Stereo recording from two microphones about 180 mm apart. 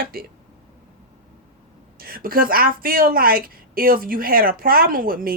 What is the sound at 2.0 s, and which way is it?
A woman's voice, 55° right (ahead or behind).